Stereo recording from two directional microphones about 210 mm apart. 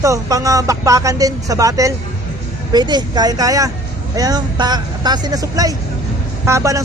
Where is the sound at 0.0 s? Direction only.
15° right (ahead or behind).